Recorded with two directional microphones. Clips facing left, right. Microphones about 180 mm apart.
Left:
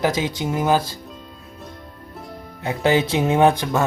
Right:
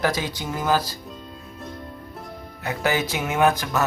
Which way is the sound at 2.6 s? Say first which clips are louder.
Left 5 dB; 25° left (ahead or behind).